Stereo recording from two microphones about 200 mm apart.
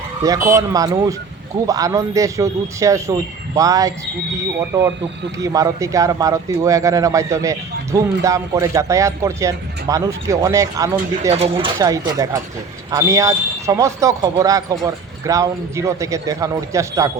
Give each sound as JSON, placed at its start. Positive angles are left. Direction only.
{"t": 0.2, "sound": "speech", "side_deg": -15}